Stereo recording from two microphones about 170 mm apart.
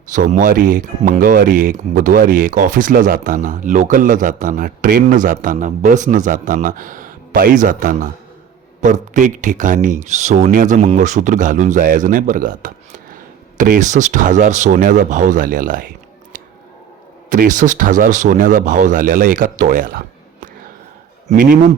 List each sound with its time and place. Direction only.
0.1 s speech: 50° right (ahead or behind)
17.2 s speech: 50° right (ahead or behind)